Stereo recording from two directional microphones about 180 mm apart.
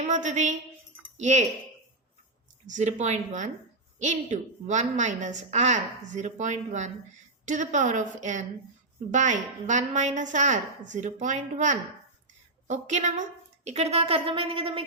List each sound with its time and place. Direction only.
0.0 s a woman's voice: 40° right (ahead or behind)
2.6 s a woman's voice: 40° right (ahead or behind)